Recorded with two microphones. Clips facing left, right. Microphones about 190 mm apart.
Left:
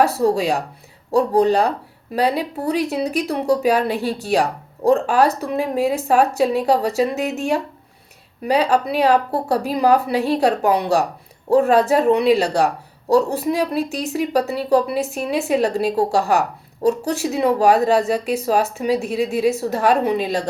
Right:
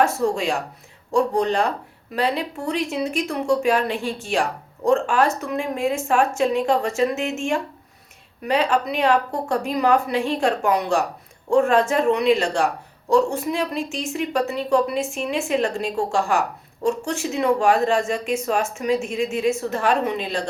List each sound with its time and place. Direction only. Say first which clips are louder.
0.0 s speech: left 3 dB; 35° left (ahead or behind)